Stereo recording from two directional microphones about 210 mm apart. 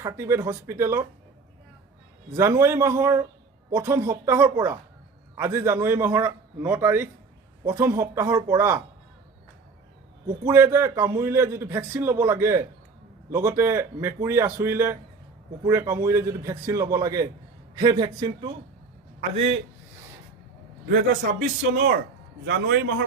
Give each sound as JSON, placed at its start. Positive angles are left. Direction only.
{"t": 0.0, "sound": "a man's voice", "side_deg": -15}
{"t": 2.3, "sound": "a man's voice", "side_deg": -15}
{"t": 10.4, "sound": "a man's voice", "side_deg": -15}
{"t": 20.9, "sound": "speech", "side_deg": -50}